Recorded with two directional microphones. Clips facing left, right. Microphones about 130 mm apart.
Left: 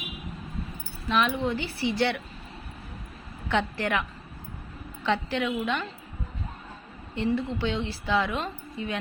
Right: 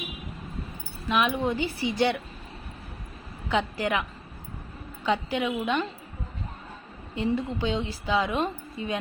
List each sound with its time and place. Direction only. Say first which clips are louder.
1.0 s a woman's voice: right 1 dB; 15° right (ahead or behind)
3.5 s a woman's voice: even; 15° right (ahead or behind)
5.0 s a woman's voice: right 1 dB; 15° right (ahead or behind)
7.2 s a woman's voice: even; 15° right (ahead or behind)